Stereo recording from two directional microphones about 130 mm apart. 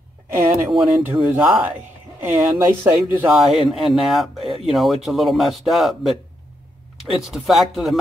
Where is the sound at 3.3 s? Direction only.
Centre (ahead or behind).